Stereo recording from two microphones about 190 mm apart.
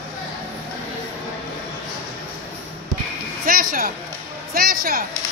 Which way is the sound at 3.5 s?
50° right (ahead or behind).